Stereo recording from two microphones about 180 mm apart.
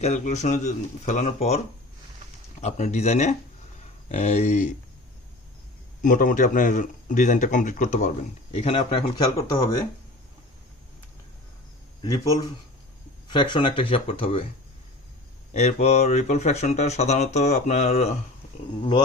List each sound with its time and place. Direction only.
0.0 s speech: 40° left (ahead or behind)
6.0 s speech: 45° left (ahead or behind); by 9.6 s 25° left (ahead or behind)
12.0 s speech: 20° left (ahead or behind)
15.5 s speech: 35° left (ahead or behind)